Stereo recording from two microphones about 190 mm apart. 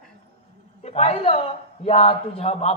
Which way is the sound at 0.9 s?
35° left (ahead or behind).